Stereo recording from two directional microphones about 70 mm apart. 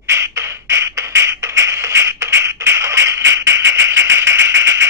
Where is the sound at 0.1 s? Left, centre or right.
Right.